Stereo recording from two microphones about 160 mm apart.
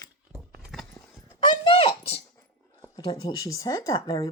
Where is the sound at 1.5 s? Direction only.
30° left (ahead or behind).